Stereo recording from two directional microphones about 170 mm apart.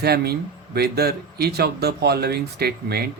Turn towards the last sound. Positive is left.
turn(degrees=-65)  # may be behind; listen again after turning